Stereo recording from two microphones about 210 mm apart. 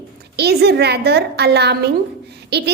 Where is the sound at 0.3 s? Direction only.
50° right (ahead or behind).